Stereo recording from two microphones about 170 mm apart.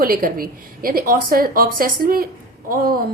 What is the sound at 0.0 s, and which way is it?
A woman's voice, 55° right (ahead or behind).